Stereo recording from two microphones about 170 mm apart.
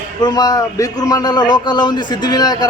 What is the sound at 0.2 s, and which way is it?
A man's voice, 25° left (ahead or behind).